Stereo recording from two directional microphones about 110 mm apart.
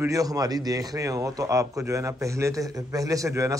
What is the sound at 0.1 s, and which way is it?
A man's voice, 35° right (ahead or behind).